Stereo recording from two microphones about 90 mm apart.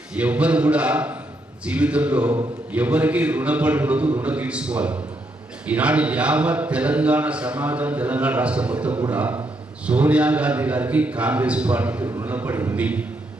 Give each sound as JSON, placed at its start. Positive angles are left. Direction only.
{"t": 0.2, "sound": "a man's voice", "side_deg": -15}
{"t": 12.7, "sound": "a man's voice", "side_deg": -15}